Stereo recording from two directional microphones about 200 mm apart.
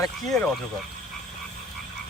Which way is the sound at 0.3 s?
5° left (ahead or behind).